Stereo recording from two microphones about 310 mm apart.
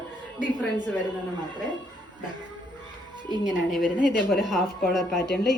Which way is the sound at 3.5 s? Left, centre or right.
Centre.